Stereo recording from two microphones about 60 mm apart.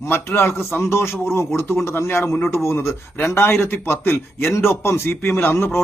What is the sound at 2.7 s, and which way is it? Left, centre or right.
A man's voice, left.